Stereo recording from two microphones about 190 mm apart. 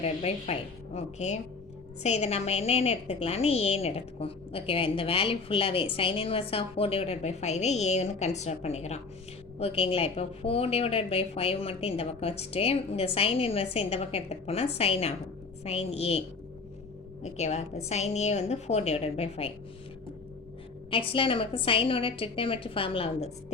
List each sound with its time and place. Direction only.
0.0 s a woman's voice: 35° left (ahead or behind)
17.2 s a woman's voice: 35° left (ahead or behind)
20.9 s a woman's voice: 30° left (ahead or behind)